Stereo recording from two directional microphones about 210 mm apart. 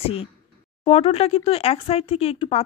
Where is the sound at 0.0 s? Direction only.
25° left (ahead or behind).